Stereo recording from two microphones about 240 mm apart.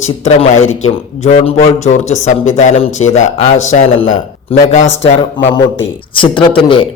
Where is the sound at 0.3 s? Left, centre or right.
Left.